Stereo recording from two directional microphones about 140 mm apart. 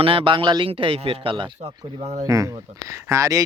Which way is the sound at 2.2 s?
20° right (ahead or behind).